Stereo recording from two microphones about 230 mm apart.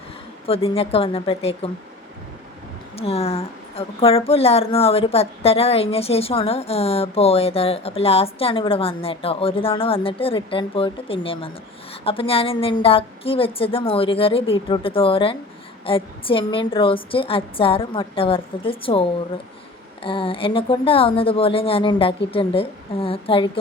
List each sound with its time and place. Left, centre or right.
0.4 s a woman's voice: left
2.9 s a woman's voice: left